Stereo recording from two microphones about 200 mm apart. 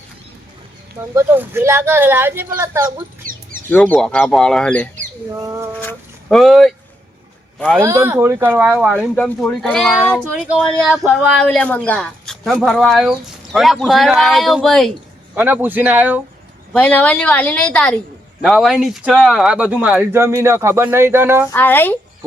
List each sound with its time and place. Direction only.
1.1 s speech: 10° right (ahead or behind)
3.2 s a sound: 45° right (ahead or behind)
3.7 s a woman's voice: 10° left (ahead or behind)
5.3 s speech: 15° right (ahead or behind)
5.8 s a sound: 5° left (ahead or behind)
7.8 s speech: 15° right (ahead or behind)
9.1 s speech: 5° left (ahead or behind)
15.4 s speech: 10° right (ahead or behind)
16.7 s a woman's voice: 5° left (ahead or behind); by 21.5 s 10° right (ahead or behind)
21.5 s a woman's voice: 10° left (ahead or behind)